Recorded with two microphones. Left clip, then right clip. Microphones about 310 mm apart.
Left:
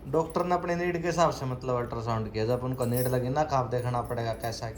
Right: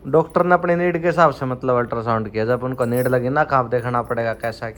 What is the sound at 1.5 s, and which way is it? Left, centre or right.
A man's voice, left.